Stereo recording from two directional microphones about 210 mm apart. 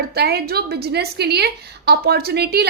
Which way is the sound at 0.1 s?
50° right (ahead or behind).